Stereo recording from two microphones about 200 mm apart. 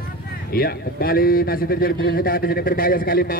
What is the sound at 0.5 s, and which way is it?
A man's voice, 50° left (ahead or behind).